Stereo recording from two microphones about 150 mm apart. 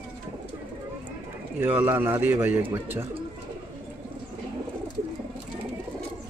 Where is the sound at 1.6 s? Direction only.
15° right (ahead or behind).